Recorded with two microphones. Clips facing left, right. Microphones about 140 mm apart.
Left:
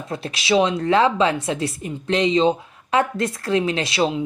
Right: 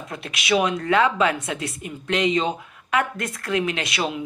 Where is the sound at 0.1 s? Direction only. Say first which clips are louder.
Left 3 dB; 30° left (ahead or behind).